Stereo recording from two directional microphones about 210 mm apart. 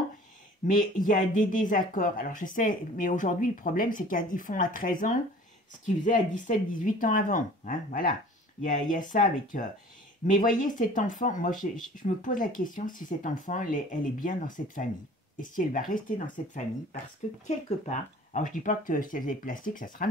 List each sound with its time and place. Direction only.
0.7 s speech: 40° left (ahead or behind)